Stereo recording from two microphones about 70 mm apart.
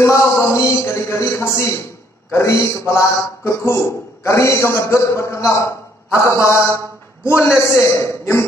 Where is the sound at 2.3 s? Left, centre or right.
Left.